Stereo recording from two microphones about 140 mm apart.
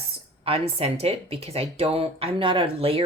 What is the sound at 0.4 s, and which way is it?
Speech, 45° right (ahead or behind).